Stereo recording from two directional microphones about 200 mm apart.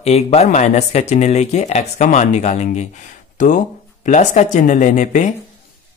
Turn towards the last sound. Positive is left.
turn(degrees=40)  # may be behind; listen again after turning